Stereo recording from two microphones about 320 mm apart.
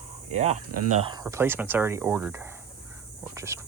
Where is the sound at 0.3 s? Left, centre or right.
Right.